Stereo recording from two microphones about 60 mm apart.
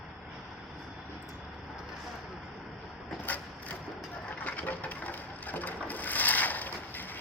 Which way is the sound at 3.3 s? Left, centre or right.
Left.